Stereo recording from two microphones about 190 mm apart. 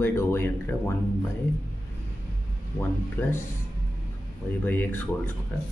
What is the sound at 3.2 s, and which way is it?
Speech, 10° left (ahead or behind).